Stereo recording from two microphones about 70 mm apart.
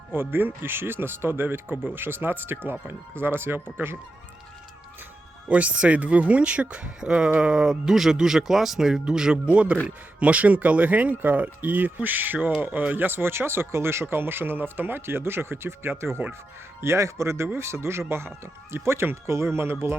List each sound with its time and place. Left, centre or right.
0.1 s speech: right
5.5 s speech: centre; by 19.7 s right